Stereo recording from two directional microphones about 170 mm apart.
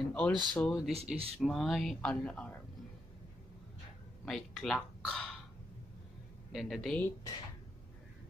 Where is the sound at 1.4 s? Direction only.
Centre (ahead or behind).